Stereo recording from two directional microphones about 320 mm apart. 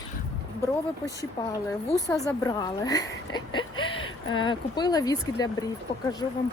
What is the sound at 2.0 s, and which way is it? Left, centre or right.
A woman's voice, centre.